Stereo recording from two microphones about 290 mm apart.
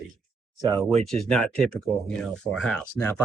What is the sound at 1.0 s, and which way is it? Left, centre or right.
Speech, centre.